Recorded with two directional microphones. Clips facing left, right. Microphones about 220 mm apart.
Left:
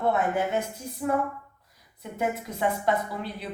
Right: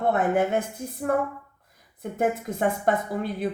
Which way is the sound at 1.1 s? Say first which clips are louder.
Right 3 dB; 50° right (ahead or behind).